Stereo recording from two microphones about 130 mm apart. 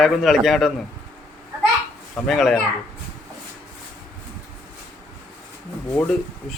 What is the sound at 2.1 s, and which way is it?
Speech, 5° left (ahead or behind).